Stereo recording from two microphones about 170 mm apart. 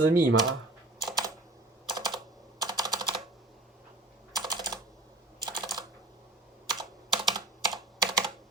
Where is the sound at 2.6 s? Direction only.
20° right (ahead or behind).